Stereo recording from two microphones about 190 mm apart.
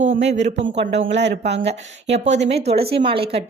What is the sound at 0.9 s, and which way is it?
Speech, 70° right (ahead or behind).